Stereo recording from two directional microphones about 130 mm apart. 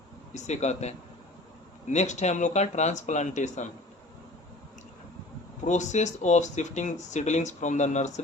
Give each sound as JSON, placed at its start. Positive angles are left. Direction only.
{"t": 0.3, "sound": "speech", "side_deg": 60}
{"t": 5.6, "sound": "speech", "side_deg": 65}